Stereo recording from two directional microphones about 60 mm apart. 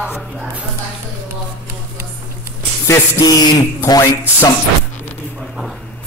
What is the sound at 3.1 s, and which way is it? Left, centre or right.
Speech, left.